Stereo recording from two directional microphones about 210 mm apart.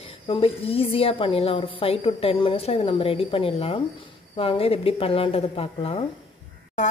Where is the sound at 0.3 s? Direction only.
25° left (ahead or behind).